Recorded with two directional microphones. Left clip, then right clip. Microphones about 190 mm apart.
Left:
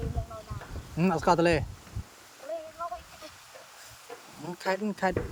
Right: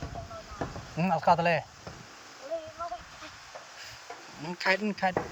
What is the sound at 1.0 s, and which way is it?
Speech, 50° left (ahead or behind).